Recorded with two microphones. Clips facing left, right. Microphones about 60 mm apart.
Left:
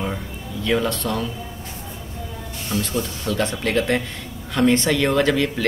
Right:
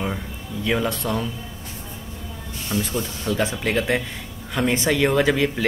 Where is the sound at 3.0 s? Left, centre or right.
Centre.